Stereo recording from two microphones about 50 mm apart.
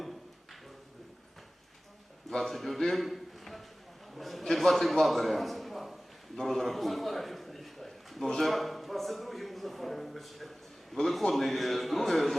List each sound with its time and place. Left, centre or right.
2.3 s a man's voice: centre
4.1 s a sound: centre
8.3 s a man's voice: centre